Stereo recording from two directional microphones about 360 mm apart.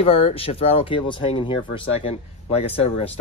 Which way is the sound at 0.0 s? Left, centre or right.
Centre.